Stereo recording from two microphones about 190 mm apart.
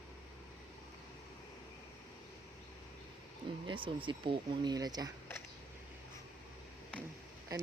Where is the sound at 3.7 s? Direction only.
25° right (ahead or behind).